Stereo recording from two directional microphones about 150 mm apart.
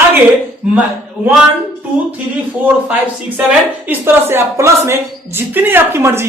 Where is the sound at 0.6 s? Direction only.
10° right (ahead or behind).